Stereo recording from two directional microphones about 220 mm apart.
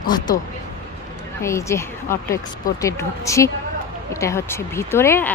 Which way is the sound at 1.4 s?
15° left (ahead or behind).